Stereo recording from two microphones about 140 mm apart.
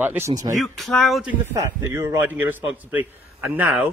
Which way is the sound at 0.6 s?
Centre (ahead or behind).